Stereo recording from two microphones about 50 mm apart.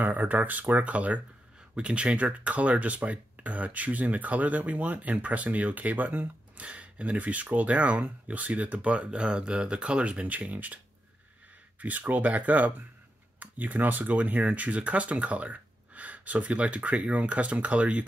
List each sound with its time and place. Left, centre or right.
0.0 s speech: right
11.8 s speech: right